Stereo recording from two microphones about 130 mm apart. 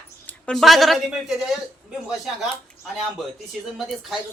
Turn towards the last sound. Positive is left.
turn(degrees=0)  # may be behind; listen again after turning